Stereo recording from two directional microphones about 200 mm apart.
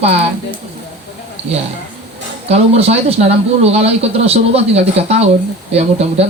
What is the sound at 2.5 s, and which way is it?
Speech, 30° right (ahead or behind).